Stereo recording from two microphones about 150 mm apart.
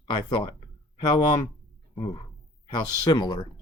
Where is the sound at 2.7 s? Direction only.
30° left (ahead or behind).